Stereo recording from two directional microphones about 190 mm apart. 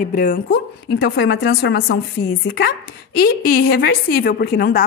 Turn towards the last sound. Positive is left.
turn(degrees=55)  # may be behind; listen again after turning